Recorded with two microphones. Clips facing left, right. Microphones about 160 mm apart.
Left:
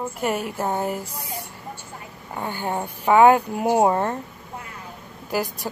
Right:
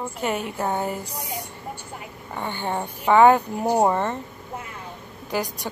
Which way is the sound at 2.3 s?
5° left (ahead or behind).